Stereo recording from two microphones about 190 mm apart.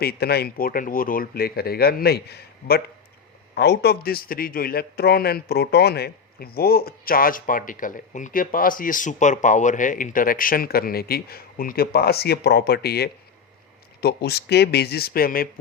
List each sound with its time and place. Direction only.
0.0 s a man's voice: 55° left (ahead or behind)